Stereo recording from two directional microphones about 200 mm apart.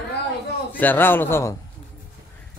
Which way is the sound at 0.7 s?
10° left (ahead or behind).